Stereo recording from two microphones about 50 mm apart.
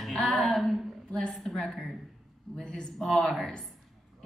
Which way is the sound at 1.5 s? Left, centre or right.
Centre.